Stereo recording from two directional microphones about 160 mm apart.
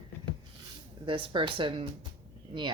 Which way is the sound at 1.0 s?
30° right (ahead or behind).